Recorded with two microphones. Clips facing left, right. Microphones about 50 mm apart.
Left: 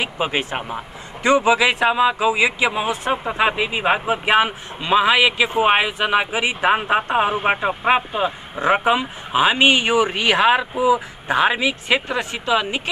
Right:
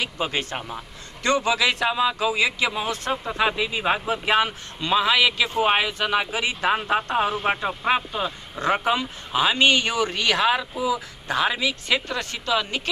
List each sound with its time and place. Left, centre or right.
0.0 s speech: left